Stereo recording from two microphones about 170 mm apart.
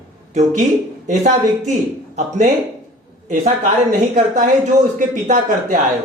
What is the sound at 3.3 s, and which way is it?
A man's voice, 50° right (ahead or behind).